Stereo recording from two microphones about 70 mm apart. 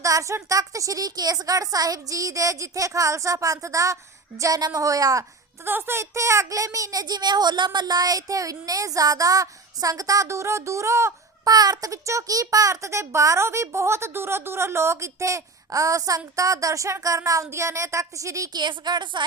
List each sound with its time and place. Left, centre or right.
0.0 s a child's voice: right
5.6 s a child's voice: right
11.4 s a child's voice: right
18.5 s speech: right